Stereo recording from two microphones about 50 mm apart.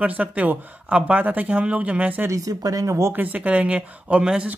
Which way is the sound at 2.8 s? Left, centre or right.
Right.